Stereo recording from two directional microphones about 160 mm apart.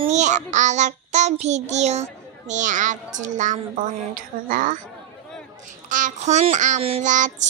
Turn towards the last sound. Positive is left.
turn(degrees=-50)  # may be behind; listen again after turning